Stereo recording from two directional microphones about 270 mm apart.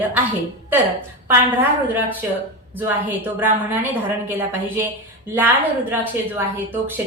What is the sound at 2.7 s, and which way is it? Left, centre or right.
A woman's voice, centre.